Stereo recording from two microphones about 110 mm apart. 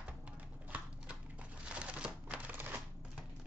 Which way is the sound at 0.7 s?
15° right (ahead or behind).